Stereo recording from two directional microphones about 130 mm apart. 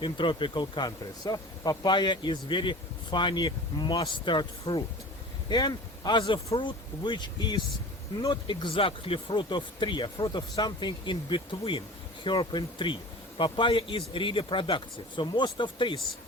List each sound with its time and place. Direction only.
0.0 s speech: 40° left (ahead or behind)